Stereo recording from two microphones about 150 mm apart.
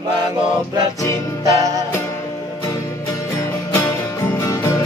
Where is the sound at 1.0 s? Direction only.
20° left (ahead or behind).